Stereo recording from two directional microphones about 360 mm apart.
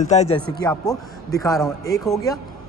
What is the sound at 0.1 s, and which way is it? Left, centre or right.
A man's voice, centre.